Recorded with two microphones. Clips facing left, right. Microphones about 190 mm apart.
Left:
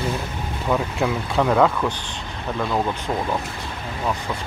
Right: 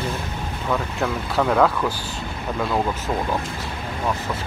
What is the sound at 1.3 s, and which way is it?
Speech, centre (ahead or behind).